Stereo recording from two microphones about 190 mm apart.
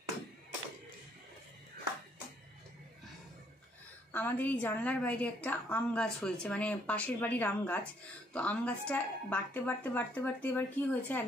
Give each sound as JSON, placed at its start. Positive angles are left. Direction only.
{"t": 4.1, "sound": "a woman's voice", "side_deg": 10}